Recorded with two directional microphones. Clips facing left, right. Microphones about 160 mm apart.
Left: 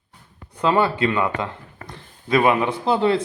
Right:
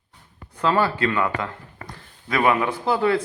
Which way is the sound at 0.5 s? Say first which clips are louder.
Left 2 dB; 20° left (ahead or behind).